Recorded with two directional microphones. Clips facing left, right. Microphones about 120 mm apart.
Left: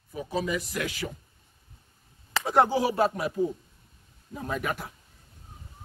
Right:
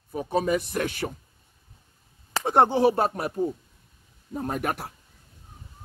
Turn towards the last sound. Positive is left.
turn(degrees=-55)  # may be behind; listen again after turning